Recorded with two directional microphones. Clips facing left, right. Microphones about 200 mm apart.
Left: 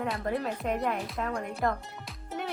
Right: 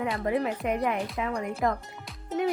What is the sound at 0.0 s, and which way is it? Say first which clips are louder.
Speech: right 4 dB; centre (ahead or behind).